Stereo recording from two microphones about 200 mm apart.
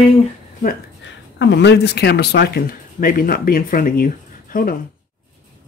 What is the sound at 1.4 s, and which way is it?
Speech, 60° left (ahead or behind).